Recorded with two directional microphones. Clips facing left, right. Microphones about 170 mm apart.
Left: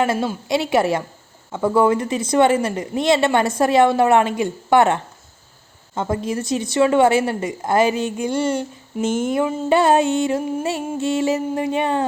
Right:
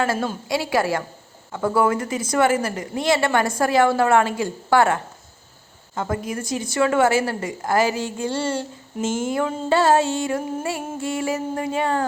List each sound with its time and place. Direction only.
0.0 s a woman's voice: 15° left (ahead or behind)